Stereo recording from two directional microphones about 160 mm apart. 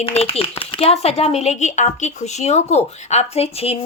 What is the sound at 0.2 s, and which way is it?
Speech, 35° left (ahead or behind).